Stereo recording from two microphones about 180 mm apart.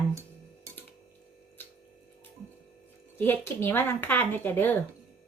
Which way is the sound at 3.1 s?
10° left (ahead or behind).